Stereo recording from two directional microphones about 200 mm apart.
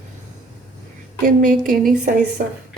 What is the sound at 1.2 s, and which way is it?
Speech, 40° right (ahead or behind).